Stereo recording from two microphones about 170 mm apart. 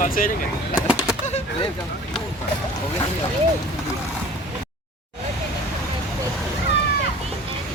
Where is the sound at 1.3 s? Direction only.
40° left (ahead or behind).